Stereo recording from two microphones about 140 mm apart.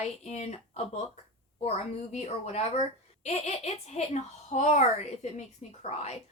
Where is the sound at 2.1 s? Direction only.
55° left (ahead or behind).